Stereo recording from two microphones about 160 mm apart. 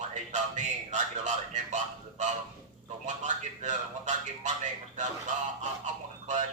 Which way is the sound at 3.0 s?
50° right (ahead or behind).